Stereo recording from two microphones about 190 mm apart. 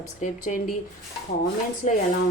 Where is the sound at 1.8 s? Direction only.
40° left (ahead or behind).